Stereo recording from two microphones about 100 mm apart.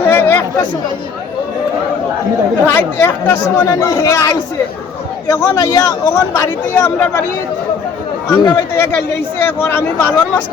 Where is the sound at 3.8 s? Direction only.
30° left (ahead or behind).